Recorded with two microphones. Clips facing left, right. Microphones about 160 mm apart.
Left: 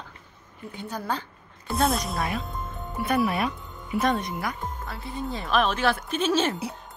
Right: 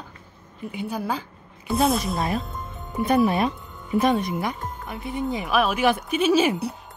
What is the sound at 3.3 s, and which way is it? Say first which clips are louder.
A woman's voice: right 4 dB; 25° right (ahead or behind).